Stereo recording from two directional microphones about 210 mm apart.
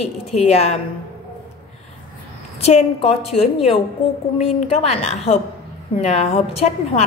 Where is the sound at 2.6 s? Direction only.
30° left (ahead or behind).